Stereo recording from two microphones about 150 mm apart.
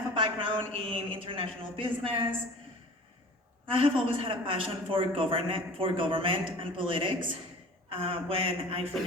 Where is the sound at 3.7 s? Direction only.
35° right (ahead or behind).